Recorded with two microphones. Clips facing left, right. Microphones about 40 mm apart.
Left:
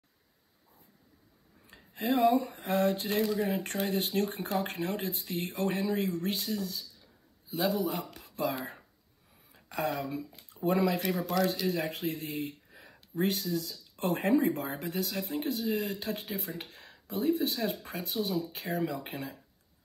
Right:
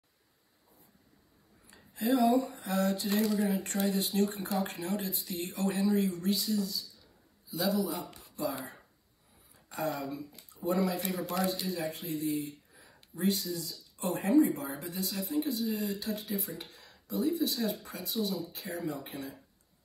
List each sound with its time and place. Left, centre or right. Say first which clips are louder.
1.7 s speech: right 1 dB; left